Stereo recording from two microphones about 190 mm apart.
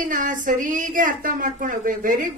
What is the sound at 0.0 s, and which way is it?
A woman's voice, 45° right (ahead or behind).